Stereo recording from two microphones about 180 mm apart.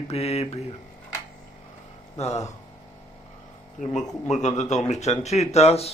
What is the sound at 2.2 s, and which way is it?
Mantra, 35° left (ahead or behind).